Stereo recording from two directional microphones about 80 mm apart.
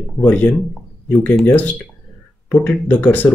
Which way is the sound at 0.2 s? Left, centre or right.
Left.